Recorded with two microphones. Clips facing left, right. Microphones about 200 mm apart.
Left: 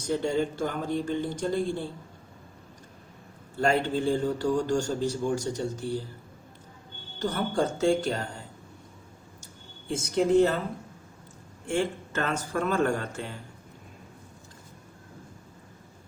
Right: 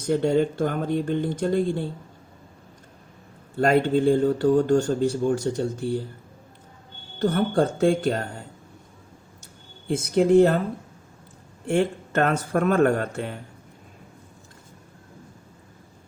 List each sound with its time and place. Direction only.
0.1 s speech: 55° right (ahead or behind)
3.7 s speech: 55° right (ahead or behind)
7.2 s speech: 55° right (ahead or behind)
9.9 s speech: 60° right (ahead or behind)
11.7 s speech: 60° right (ahead or behind)